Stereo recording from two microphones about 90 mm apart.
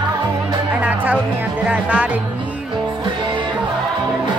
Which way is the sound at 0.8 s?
15° right (ahead or behind).